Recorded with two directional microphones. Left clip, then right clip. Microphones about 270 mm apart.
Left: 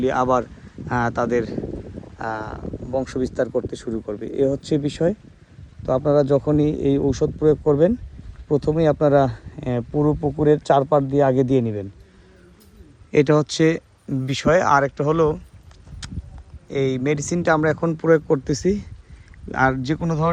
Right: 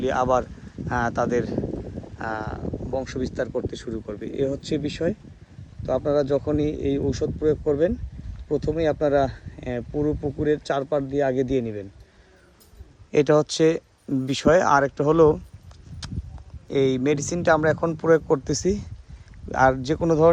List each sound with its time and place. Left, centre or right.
0.0 s speech: centre
13.1 s speech: centre
16.6 s speech: centre